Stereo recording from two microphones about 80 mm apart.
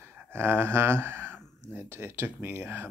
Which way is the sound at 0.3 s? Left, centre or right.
Right.